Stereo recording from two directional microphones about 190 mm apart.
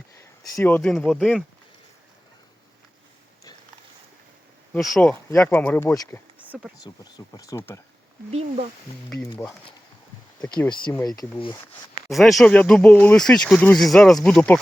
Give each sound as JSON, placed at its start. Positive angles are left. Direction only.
{"t": 0.2, "sound": "speech", "side_deg": 15}
{"t": 4.7, "sound": "speech", "side_deg": 5}
{"t": 6.5, "sound": "speech", "side_deg": -5}
{"t": 6.8, "sound": "speech", "side_deg": 20}
{"t": 8.3, "sound": "speech", "side_deg": -35}
{"t": 9.4, "sound": "speech", "side_deg": 15}
{"t": 11.2, "sound": "speech", "side_deg": 25}
{"t": 12.0, "sound": "speech", "side_deg": 0}